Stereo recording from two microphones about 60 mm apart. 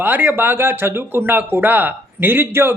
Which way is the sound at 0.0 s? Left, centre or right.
Right.